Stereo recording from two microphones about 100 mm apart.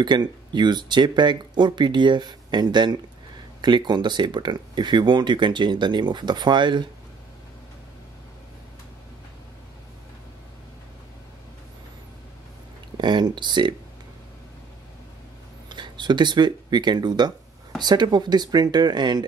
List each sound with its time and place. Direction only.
0.0 s speech: 50° right (ahead or behind)
12.9 s speech: 50° right (ahead or behind)
15.7 s speech: 50° right (ahead or behind)